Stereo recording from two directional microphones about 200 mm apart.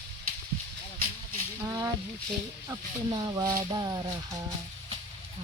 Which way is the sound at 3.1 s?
20° right (ahead or behind).